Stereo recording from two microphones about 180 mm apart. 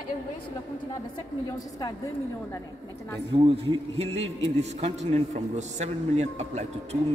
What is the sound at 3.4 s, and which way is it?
A man's voice, 30° right (ahead or behind).